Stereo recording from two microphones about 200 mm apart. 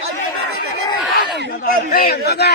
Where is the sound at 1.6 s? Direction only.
45° left (ahead or behind).